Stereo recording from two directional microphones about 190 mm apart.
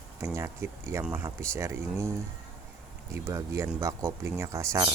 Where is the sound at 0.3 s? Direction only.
15° right (ahead or behind).